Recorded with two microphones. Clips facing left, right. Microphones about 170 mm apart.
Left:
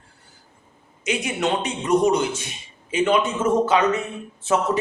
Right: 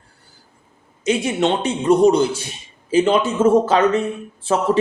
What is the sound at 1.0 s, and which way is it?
A man's voice, 30° right (ahead or behind).